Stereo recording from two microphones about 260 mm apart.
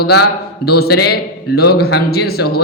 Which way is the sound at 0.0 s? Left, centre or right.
Left.